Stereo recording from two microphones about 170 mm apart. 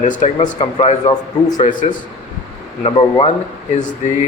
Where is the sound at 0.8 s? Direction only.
25° left (ahead or behind).